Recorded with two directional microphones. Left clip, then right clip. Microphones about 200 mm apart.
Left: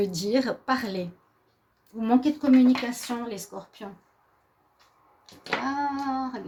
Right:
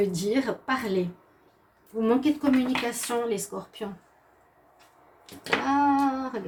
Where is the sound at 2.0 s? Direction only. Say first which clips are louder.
Even; 40° left (ahead or behind).